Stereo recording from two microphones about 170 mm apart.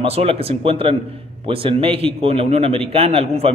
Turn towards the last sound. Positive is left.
turn(degrees=-35)  # may be behind; listen again after turning